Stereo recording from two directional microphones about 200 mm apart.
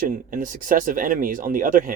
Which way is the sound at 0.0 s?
45° right (ahead or behind).